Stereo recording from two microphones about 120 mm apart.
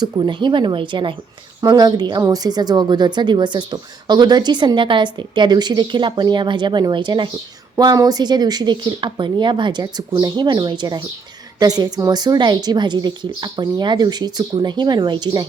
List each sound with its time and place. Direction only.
0.0 s speech: 40° right (ahead or behind)